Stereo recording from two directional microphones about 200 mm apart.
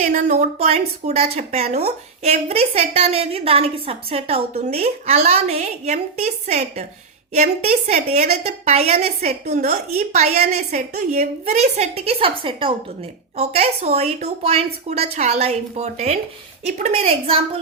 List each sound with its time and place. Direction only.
0.0 s a woman's voice: 40° right (ahead or behind)